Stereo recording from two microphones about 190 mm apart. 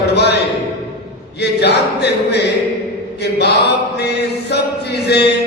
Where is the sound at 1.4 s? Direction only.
60° left (ahead or behind).